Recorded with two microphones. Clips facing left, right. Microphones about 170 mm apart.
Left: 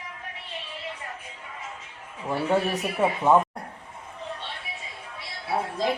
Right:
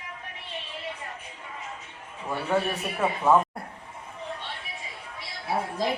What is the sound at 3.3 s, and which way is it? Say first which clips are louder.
Speech: left 1 dB; 20° left (ahead or behind).